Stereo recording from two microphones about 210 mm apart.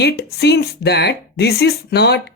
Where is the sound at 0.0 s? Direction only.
50° left (ahead or behind).